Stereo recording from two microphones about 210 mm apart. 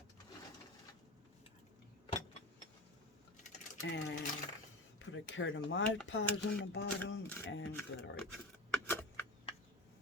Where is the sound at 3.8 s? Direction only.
55° left (ahead or behind).